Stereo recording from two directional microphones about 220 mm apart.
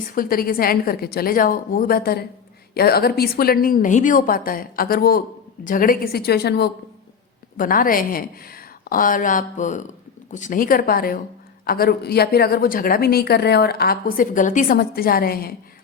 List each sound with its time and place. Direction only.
0.1 s a woman's voice: 40° left (ahead or behind)